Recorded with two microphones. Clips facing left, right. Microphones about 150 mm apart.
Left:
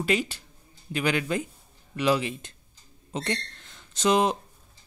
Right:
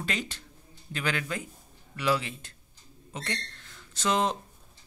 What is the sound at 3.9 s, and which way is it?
Speech, 15° left (ahead or behind).